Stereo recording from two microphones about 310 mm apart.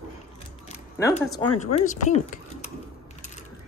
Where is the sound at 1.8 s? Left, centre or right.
Left.